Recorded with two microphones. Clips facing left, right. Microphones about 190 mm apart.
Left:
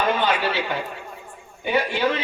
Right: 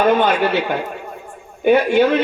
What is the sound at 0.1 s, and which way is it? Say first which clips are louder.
Speech: right 7 dB; 55° right (ahead or behind).